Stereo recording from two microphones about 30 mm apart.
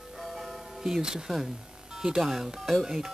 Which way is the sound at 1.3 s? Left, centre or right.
Centre.